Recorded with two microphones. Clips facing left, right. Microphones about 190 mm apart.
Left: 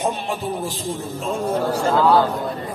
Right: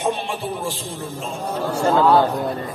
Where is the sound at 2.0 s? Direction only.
20° right (ahead or behind).